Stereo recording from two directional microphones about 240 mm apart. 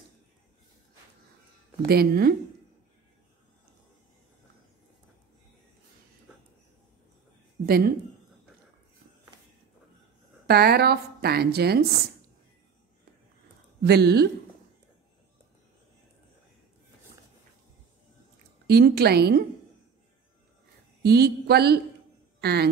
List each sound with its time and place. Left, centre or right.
1.9 s speech: right
7.6 s speech: right
10.4 s speech: right
13.8 s speech: right
18.7 s speech: right
21.0 s speech: right